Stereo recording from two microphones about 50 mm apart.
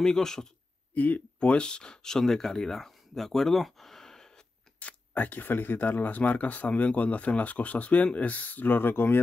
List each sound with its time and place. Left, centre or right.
0.0 s a man's voice: centre
0.9 s speech: left; by 4.3 s centre
4.7 s speech: left